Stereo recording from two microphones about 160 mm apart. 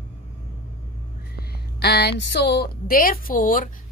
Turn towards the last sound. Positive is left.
turn(degrees=60)  # may be behind; listen again after turning